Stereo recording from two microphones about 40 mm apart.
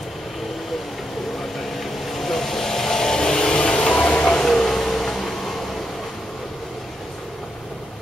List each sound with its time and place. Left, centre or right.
1.8 s vehicle: centre
4.0 s a sound: left
4.3 s vehicle: centre